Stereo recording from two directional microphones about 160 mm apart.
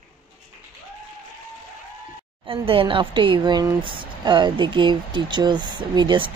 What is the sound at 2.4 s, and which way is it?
Speech, 35° right (ahead or behind).